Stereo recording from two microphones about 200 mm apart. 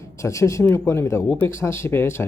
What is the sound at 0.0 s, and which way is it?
Speech, 15° left (ahead or behind).